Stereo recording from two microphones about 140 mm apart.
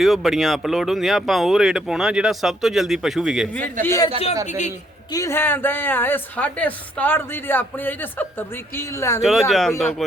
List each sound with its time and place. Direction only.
0.0 s speech: centre (ahead or behind)
3.8 s a man's voice: 20° left (ahead or behind)
4.4 s a man's voice: 60° left (ahead or behind)
5.1 s a woman's voice: 20° left (ahead or behind)
9.2 s speech: centre (ahead or behind)